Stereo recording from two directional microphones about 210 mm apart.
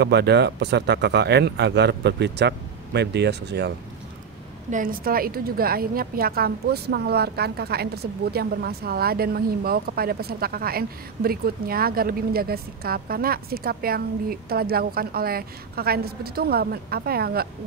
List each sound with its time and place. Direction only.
0.0 s a woman's voice: 50° right (ahead or behind)
4.6 s a woman's voice: 40° right (ahead or behind)